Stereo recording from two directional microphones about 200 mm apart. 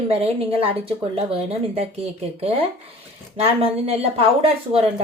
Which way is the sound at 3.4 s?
30° right (ahead or behind).